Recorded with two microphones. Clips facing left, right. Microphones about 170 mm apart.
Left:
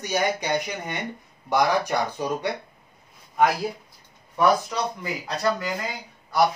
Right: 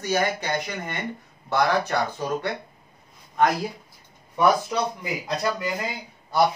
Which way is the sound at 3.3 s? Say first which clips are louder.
Even; 5° left (ahead or behind).